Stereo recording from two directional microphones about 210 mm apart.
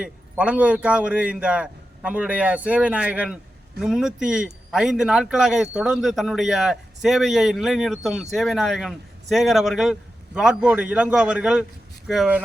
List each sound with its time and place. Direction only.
0.0 s a man's voice: 5° right (ahead or behind)